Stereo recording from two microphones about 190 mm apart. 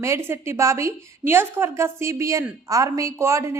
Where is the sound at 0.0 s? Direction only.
15° right (ahead or behind).